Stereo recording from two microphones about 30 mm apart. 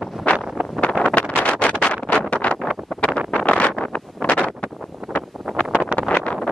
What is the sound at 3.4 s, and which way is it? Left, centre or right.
Wind noise, left.